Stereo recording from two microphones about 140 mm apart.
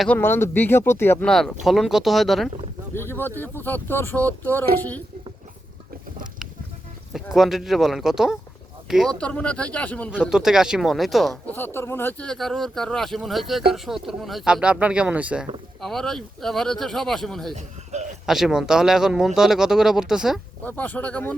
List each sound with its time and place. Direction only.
0.2 s speech: 15° left (ahead or behind)
1.3 s speech: 5° left (ahead or behind)
2.9 s speech: 15° left (ahead or behind)
7.1 s speech: centre (ahead or behind)
9.1 s speech: 10° left (ahead or behind)
10.1 s speech: 5° right (ahead or behind)
11.4 s speech: 15° left (ahead or behind); by 15.4 s 10° right (ahead or behind)
15.8 s speech: 5° left (ahead or behind)
17.5 s a man's voice: 55° right (ahead or behind)
18.3 s speech: 5° right (ahead or behind)
20.7 s speech: 15° left (ahead or behind)